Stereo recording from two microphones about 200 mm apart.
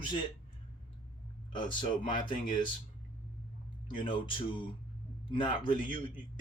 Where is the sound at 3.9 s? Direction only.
25° left (ahead or behind).